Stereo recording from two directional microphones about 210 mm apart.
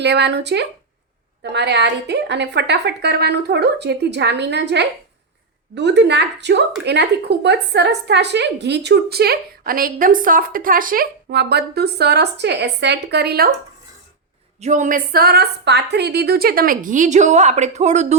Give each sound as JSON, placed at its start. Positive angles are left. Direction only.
{"t": 0.0, "sound": "a woman's voice", "side_deg": -55}
{"t": 14.6, "sound": "a woman's voice", "side_deg": -35}